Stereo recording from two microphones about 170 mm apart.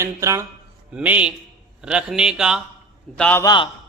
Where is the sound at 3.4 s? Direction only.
25° left (ahead or behind).